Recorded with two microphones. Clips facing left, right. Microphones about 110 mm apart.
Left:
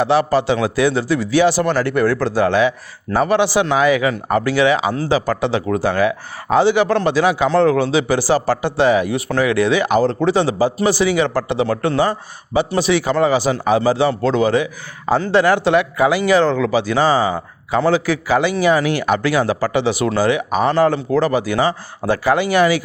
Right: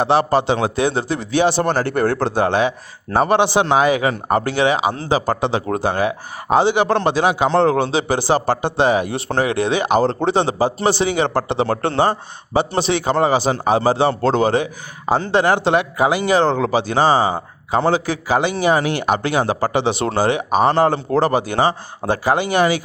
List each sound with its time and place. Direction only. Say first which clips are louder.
0.0 s a man's voice: even; 25° right (ahead or behind)